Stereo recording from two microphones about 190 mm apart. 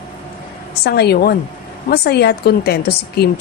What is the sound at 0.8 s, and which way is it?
A woman's voice, 55° left (ahead or behind).